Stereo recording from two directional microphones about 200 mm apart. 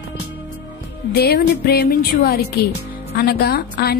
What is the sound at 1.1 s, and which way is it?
A woman's voice, 55° left (ahead or behind).